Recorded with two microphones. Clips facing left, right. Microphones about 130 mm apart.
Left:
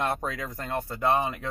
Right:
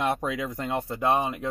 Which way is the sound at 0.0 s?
10° right (ahead or behind).